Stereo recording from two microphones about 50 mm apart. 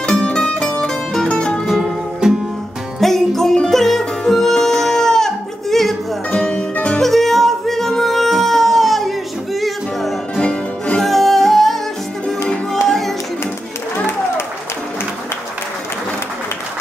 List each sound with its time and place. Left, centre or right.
0.0 s music: centre
1.7 s music: centre
3.0 s music: centre
6.7 s music: left
7.0 s music: centre
10.4 s music: left
11.0 s music: centre
12.8 s music: centre